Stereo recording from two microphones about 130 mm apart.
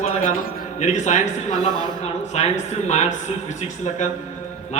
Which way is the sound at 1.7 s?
30° right (ahead or behind).